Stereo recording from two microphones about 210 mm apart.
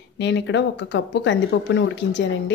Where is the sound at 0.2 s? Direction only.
55° left (ahead or behind).